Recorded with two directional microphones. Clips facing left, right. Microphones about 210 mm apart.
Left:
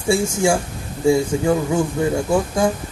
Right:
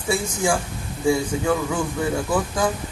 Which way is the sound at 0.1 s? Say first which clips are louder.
Left 5 dB; 25° left (ahead or behind).